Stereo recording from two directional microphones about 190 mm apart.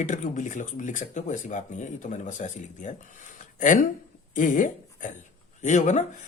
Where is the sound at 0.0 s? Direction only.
40° left (ahead or behind).